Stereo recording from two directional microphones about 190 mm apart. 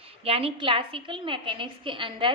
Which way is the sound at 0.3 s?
30° right (ahead or behind).